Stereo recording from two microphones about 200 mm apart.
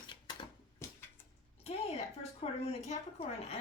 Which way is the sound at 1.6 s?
30° left (ahead or behind).